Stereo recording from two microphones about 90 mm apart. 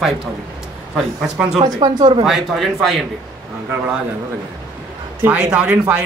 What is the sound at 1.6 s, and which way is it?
Speech, 55° right (ahead or behind).